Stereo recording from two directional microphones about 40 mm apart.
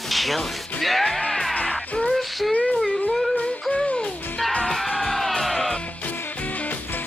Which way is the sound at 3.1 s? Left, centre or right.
Centre.